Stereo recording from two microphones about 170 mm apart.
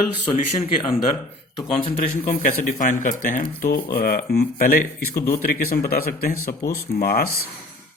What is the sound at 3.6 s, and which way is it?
Speech, 60° left (ahead or behind).